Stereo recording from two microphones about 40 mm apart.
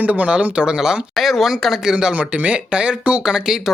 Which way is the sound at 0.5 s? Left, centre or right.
Right.